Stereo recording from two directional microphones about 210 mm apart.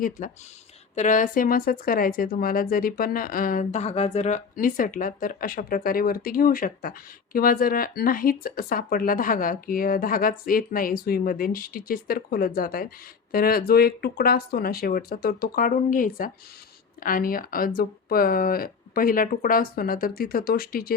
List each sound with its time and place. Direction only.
0.9 s speech: 35° left (ahead or behind)